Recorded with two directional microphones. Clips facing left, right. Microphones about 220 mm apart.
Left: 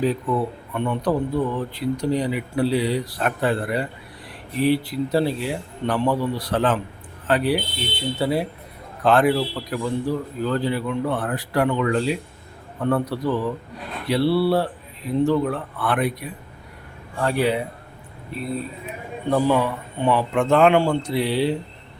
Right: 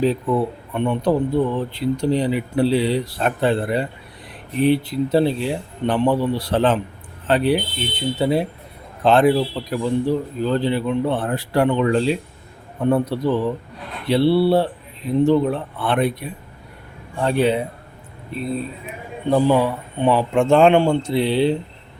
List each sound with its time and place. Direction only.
0.0 s speech: 25° right (ahead or behind)
19.3 s speech: 25° right (ahead or behind)